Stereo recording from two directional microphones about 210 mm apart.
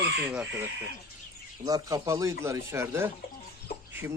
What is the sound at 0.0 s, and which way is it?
A man's voice, 10° right (ahead or behind).